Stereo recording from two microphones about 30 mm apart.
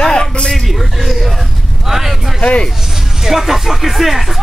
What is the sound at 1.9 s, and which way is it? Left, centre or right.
Vehicle, centre.